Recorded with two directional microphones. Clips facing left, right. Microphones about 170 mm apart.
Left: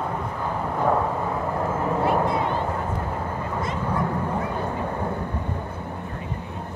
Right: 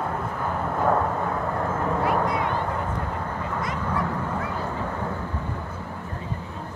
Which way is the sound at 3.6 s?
25° left (ahead or behind).